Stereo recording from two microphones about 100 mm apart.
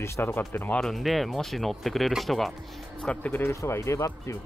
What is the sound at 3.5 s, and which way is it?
Speech, 30° left (ahead or behind).